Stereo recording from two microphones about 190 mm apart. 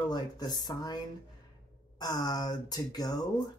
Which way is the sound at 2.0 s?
20° left (ahead or behind).